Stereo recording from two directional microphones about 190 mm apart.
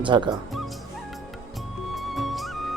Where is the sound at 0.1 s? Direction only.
25° right (ahead or behind).